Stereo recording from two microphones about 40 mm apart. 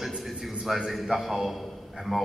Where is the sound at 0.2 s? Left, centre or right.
Centre.